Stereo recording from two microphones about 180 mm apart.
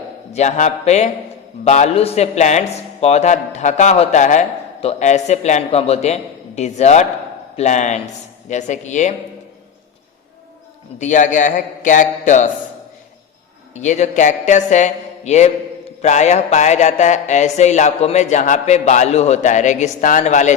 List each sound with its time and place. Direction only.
0.3 s speech: 40° left (ahead or behind)
10.9 s a man's voice: 40° left (ahead or behind)
13.7 s speech: 40° left (ahead or behind)